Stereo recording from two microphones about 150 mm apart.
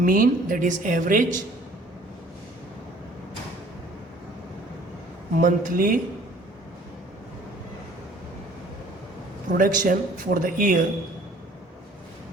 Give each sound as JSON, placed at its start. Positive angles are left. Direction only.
{"t": 0.0, "sound": "a woman's voice", "side_deg": -65}
{"t": 5.4, "sound": "a woman's voice", "side_deg": -65}
{"t": 9.5, "sound": "a woman's voice", "side_deg": -65}